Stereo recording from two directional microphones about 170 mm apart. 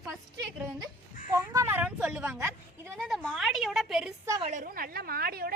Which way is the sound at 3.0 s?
Centre (ahead or behind).